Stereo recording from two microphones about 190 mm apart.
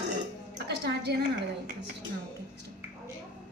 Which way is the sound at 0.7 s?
60° right (ahead or behind).